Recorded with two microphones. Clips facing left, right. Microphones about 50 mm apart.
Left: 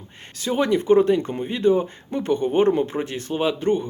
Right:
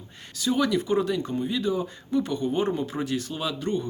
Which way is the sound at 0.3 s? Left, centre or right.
Left.